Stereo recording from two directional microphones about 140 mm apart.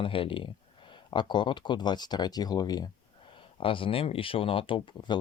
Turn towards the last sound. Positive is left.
turn(degrees=35)  # may be behind; listen again after turning